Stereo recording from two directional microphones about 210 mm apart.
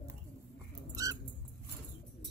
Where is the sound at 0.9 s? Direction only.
15° right (ahead or behind).